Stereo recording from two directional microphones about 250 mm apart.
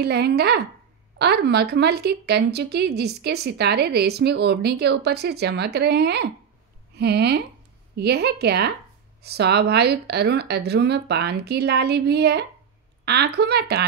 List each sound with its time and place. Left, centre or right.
0.0 s a woman's voice: right